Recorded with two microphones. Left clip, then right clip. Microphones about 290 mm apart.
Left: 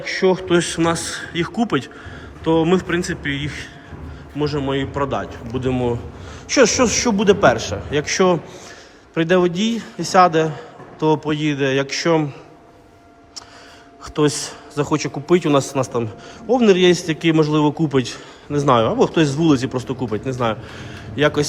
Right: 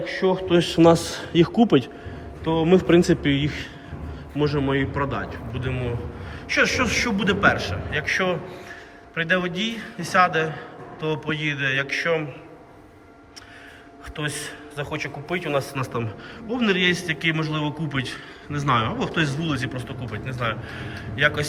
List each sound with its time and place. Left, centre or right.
0.0 s a man's voice: centre
14.2 s a man's voice: centre
15.7 s a man's voice: centre